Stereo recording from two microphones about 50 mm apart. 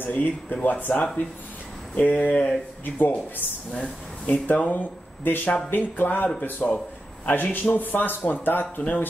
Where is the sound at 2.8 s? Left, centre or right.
Left.